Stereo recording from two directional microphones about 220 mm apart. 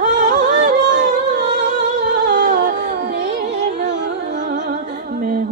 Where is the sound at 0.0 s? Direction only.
35° right (ahead or behind).